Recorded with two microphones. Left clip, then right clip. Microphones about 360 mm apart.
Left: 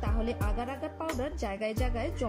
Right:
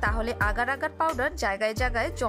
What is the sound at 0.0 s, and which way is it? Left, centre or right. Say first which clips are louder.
Speech: right 9 dB; right.